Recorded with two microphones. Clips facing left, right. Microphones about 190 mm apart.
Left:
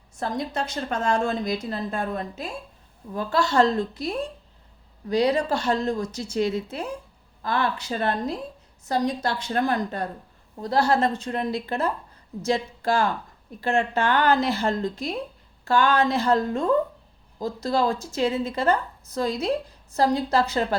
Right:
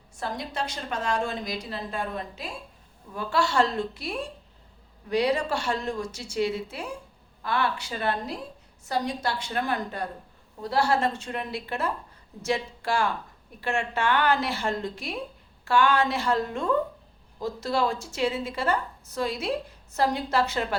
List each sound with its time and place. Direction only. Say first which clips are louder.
0.2 s a woman's voice: left 4 dB; 45° left (ahead or behind)